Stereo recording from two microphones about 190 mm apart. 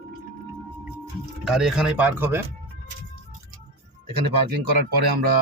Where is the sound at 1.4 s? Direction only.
Centre (ahead or behind).